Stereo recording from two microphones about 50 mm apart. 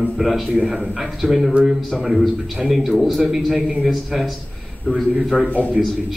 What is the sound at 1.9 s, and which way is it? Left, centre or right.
Speech, centre.